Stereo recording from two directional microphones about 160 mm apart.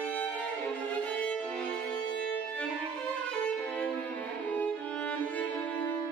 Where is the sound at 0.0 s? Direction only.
10° left (ahead or behind).